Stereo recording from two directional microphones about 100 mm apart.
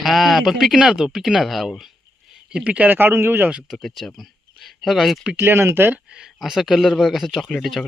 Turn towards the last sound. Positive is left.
turn(degrees=0)  # may be behind; listen again after turning